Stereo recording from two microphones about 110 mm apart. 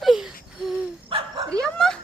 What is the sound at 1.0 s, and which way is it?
Dog, 50° right (ahead or behind).